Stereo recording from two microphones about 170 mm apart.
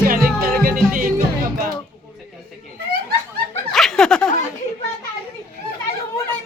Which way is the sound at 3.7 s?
5° left (ahead or behind).